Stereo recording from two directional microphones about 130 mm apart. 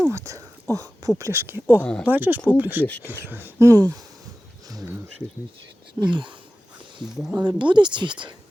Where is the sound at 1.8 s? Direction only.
5° left (ahead or behind).